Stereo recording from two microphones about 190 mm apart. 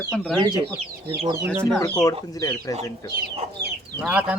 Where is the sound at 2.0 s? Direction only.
20° left (ahead or behind).